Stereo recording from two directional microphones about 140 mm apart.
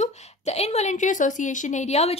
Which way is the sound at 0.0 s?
50° left (ahead or behind).